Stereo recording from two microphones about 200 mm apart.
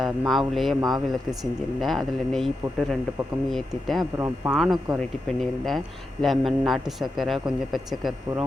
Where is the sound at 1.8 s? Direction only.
Centre (ahead or behind).